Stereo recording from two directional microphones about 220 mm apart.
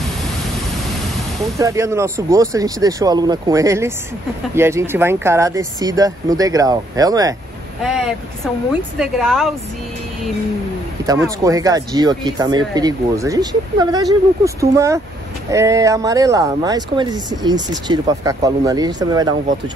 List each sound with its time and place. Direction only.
1.6 s speech: 15° right (ahead or behind)
7.8 s vehicle: centre (ahead or behind)
8.9 s speech: centre (ahead or behind)
11.0 s speech: 15° right (ahead or behind)